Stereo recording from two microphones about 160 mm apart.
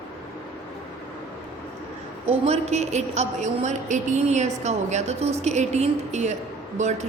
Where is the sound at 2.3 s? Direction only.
45° right (ahead or behind).